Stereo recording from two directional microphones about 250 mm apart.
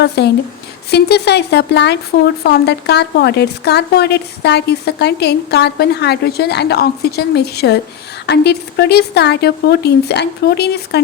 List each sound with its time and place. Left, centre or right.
0.2 s speech: left